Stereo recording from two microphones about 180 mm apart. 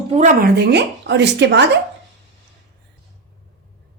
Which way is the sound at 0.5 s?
65° right (ahead or behind).